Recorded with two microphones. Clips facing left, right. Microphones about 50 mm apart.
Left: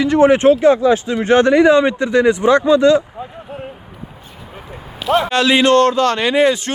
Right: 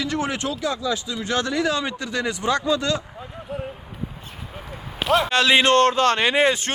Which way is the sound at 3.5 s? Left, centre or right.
Left.